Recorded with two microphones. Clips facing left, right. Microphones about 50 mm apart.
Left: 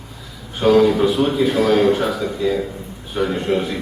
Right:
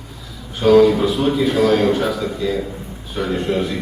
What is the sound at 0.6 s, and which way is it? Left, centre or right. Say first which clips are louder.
A man's voice: right 2 dB; centre.